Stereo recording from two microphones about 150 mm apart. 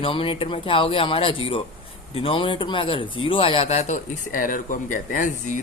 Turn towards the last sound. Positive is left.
turn(degrees=60)  # may be behind; listen again after turning